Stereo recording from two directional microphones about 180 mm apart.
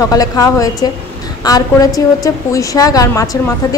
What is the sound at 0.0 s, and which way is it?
A woman's voice, 20° left (ahead or behind).